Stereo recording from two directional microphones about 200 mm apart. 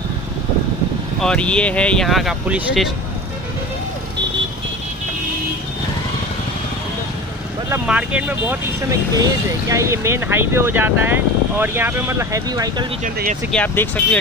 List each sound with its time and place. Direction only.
1.2 s speech: 5° left (ahead or behind)
7.7 s speech: 5° right (ahead or behind)
13.0 s speech: 40° right (ahead or behind)
13.5 s speech: 10° left (ahead or behind)